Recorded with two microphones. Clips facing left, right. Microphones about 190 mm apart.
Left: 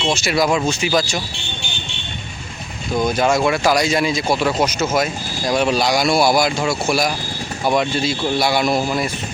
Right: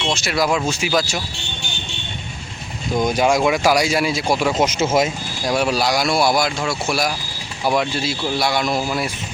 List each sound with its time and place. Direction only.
0.0 s speech: centre (ahead or behind)
3.0 s speech: 15° right (ahead or behind)
4.6 s speech: 25° right (ahead or behind)
5.0 s speech: 5° right (ahead or behind)